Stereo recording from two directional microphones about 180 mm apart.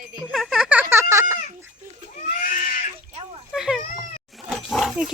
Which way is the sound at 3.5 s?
Centre (ahead or behind).